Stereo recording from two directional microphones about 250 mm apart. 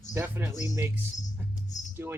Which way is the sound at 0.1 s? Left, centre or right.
Centre.